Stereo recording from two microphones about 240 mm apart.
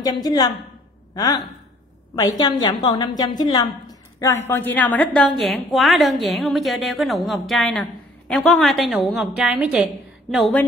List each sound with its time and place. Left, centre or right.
0.0 s a woman's voice: centre